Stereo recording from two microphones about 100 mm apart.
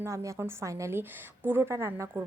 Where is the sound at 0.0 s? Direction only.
30° right (ahead or behind).